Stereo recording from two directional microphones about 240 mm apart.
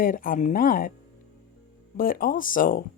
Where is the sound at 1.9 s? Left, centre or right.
Left.